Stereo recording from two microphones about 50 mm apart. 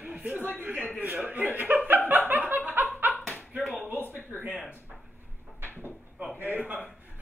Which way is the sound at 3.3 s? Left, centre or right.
Left.